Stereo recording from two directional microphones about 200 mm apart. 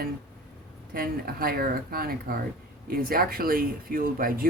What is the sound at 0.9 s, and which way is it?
Speech, 45° right (ahead or behind).